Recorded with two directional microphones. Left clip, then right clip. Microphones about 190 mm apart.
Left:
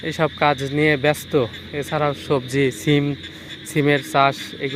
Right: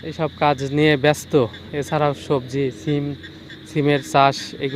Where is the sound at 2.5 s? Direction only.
10° left (ahead or behind).